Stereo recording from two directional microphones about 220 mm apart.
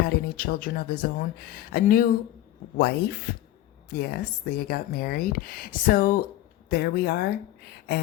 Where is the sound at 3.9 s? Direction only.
45° left (ahead or behind).